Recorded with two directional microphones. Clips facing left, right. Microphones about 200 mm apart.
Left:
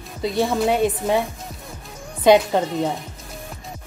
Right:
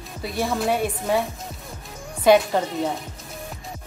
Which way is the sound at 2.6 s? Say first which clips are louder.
Left 2 dB; 20° left (ahead or behind).